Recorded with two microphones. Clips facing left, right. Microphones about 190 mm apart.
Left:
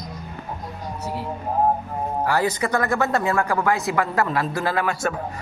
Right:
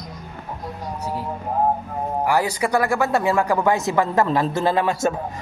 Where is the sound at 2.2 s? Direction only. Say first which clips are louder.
Right 1 dB; 15° right (ahead or behind).